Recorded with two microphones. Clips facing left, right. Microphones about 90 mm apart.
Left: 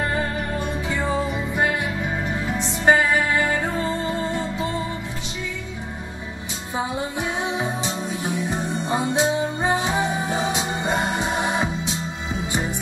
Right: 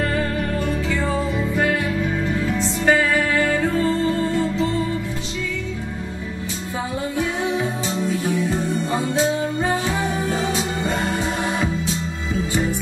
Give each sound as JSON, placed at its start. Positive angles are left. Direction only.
{"t": 0.1, "sound": "music", "side_deg": 20}
{"t": 7.2, "sound": "music", "side_deg": 20}